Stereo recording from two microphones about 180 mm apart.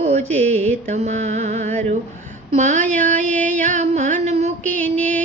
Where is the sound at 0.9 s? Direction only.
40° right (ahead or behind).